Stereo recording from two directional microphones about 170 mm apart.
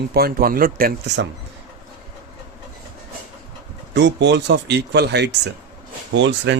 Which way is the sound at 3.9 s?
90° right.